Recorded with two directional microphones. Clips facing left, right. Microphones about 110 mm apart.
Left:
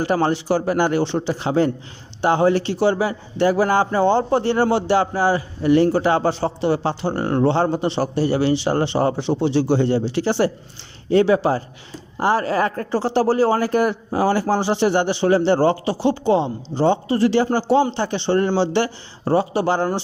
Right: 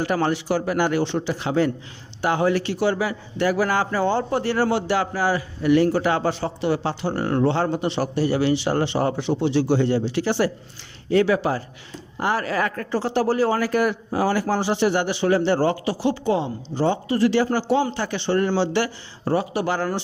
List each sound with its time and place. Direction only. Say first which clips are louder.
0.0 s a man's voice: left 3 dB; 30° left (ahead or behind)